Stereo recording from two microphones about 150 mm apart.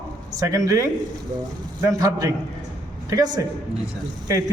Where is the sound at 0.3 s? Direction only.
20° right (ahead or behind).